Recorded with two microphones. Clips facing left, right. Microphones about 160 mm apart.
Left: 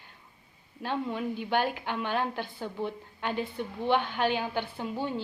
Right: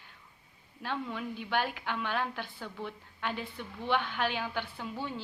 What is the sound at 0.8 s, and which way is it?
A woman's voice, 35° left (ahead or behind).